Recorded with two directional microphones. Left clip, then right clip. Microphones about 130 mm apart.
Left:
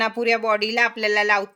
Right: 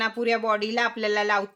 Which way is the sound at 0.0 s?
55° left (ahead or behind).